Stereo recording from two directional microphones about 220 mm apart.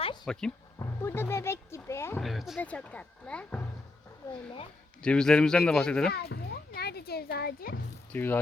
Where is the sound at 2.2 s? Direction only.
Centre (ahead or behind).